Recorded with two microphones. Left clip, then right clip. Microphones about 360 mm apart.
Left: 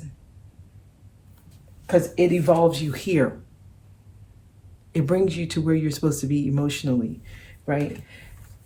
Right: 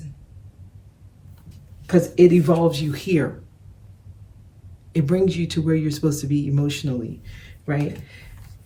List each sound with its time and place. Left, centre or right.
1.9 s speech: centre
4.9 s speech: centre